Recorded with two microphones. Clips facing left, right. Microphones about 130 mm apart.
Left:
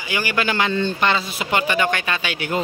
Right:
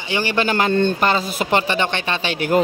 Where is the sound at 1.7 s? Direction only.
30° right (ahead or behind).